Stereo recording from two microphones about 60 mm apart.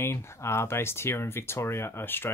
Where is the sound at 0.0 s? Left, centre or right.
Left.